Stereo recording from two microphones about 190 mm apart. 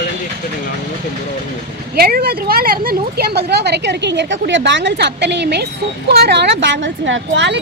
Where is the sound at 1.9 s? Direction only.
55° right (ahead or behind).